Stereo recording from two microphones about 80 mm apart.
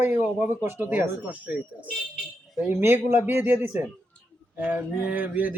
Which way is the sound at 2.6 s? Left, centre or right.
Right.